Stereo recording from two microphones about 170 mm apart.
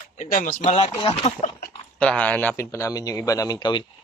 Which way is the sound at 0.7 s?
30° left (ahead or behind).